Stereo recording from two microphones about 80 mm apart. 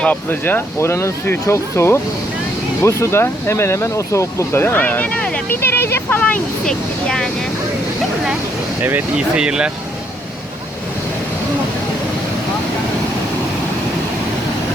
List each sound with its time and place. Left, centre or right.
0.0 s speech: left
5.5 s speech: left
6.7 s speech: centre
8.8 s speech: right
9.1 s speech: centre